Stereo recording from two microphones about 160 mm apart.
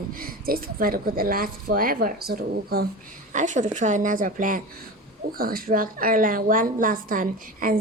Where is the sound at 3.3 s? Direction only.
50° right (ahead or behind).